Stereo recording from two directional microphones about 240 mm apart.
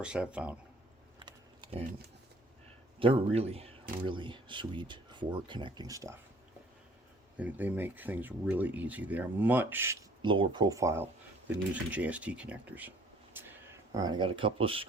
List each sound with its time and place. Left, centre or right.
0.0 s speech: centre
1.2 s a sound: right
3.0 s speech: right
7.3 s speech: centre
13.4 s a sound: centre
13.9 s speech: centre